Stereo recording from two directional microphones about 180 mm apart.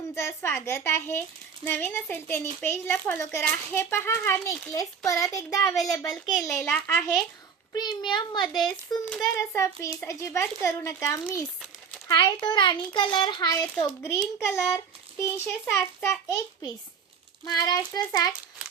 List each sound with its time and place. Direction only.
0.1 s a child's voice: 15° left (ahead or behind)
7.7 s a child's voice: 25° left (ahead or behind)
17.4 s a child's voice: 20° left (ahead or behind)